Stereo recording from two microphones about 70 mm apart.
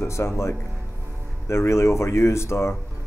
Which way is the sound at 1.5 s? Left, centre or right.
Left.